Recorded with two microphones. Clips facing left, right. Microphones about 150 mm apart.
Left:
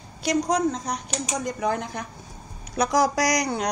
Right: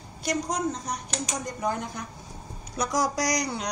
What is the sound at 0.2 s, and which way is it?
A woman's voice, 90° left.